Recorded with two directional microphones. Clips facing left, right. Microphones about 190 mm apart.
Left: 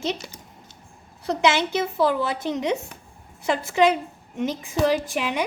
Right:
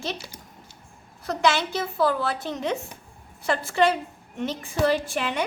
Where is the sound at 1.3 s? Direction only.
20° left (ahead or behind).